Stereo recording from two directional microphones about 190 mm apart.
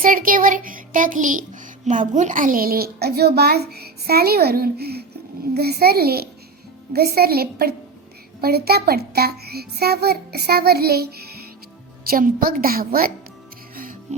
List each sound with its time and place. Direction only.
0.0 s child singing: 50° right (ahead or behind)
5.5 s a child's voice: 55° right (ahead or behind)
12.0 s child singing: 50° right (ahead or behind)
13.7 s music: 45° right (ahead or behind)